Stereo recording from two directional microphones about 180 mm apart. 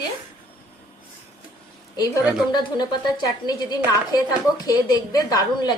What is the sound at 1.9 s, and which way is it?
Speech, 20° left (ahead or behind).